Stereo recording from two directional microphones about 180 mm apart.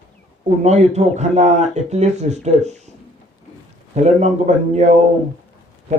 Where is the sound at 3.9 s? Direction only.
40° right (ahead or behind).